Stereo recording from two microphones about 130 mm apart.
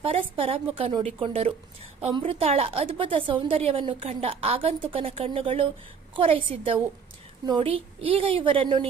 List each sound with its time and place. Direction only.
0.0 s a woman's voice: 45° right (ahead or behind)